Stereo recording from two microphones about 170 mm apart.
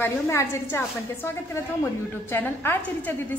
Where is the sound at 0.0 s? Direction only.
15° left (ahead or behind).